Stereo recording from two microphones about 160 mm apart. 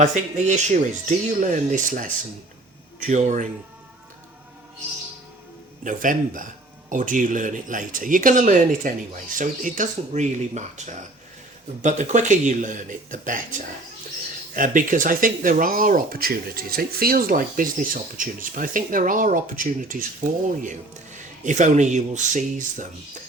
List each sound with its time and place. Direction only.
0.0 s a man's voice: 45° right (ahead or behind)
3.1 s a man's voice: 45° right (ahead or behind)
5.8 s a man's voice: 55° right (ahead or behind)